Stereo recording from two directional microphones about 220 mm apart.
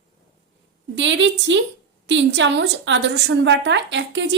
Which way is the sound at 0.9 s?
55° right (ahead or behind).